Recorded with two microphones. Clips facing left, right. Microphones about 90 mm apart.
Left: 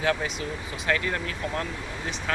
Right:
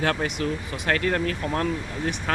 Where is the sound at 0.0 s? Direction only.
55° right (ahead or behind).